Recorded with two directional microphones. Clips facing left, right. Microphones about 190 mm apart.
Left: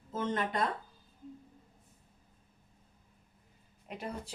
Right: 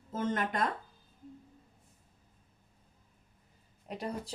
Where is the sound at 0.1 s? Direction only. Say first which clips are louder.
Right 1 dB; 50° right (ahead or behind).